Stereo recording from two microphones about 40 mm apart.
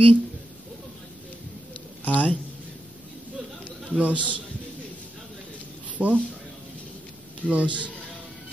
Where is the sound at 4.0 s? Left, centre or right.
Right.